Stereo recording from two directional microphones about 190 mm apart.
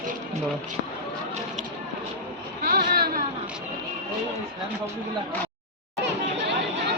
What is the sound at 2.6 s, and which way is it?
Vehicle, 55° right (ahead or behind).